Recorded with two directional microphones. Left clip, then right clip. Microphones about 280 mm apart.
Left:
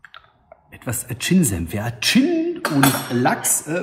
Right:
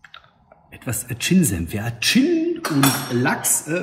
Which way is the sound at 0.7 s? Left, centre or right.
Centre.